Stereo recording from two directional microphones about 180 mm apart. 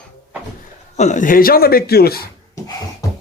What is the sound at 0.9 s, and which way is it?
Speech, 40° left (ahead or behind).